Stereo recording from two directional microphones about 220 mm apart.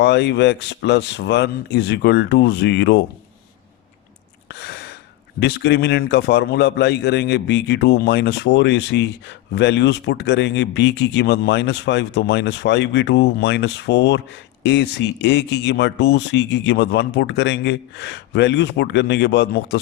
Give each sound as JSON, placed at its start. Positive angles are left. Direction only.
{"t": 0.0, "sound": "a man's voice", "side_deg": 50}
{"t": 4.4, "sound": "a sound", "side_deg": 50}
{"t": 5.4, "sound": "a man's voice", "side_deg": 50}